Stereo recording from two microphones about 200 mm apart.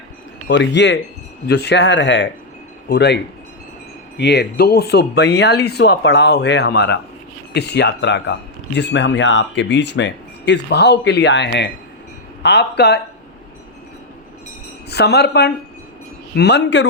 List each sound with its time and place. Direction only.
0.4 s speech: 60° left (ahead or behind)
4.2 s speech: 55° left (ahead or behind)
14.8 s speech: 55° left (ahead or behind)